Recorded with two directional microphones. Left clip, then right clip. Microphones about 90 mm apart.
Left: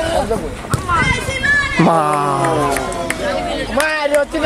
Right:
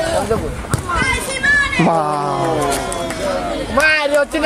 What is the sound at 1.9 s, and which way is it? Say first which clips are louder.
Speech: left 2 dB; 20° left (ahead or behind).